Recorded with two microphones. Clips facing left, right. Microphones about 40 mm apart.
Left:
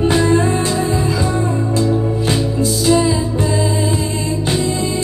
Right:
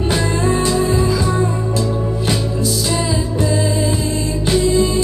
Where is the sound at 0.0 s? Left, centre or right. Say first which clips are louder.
Left 4 dB; left.